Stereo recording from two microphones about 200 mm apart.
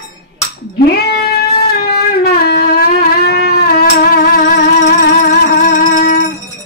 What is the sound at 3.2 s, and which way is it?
Music, 50° left (ahead or behind).